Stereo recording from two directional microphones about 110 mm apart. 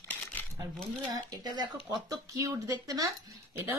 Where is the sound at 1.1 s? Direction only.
35° right (ahead or behind).